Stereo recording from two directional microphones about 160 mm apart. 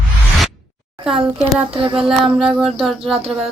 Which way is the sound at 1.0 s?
5° right (ahead or behind).